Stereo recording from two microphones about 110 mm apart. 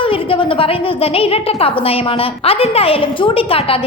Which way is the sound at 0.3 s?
55° left (ahead or behind).